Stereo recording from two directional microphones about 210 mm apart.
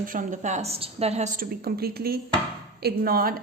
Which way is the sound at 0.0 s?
40° right (ahead or behind).